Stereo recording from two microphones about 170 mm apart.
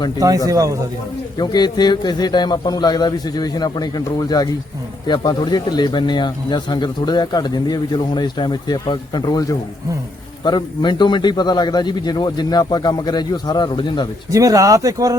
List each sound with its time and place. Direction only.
0.2 s speech: 20° right (ahead or behind)
1.4 s a man's voice: 25° left (ahead or behind)
14.3 s speech: 20° right (ahead or behind)